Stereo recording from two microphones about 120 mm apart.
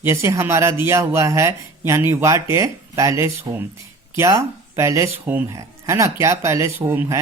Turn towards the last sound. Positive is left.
turn(degrees=-20)  # may be behind; listen again after turning